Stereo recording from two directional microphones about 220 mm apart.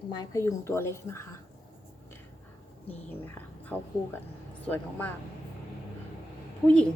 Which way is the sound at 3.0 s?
10° left (ahead or behind).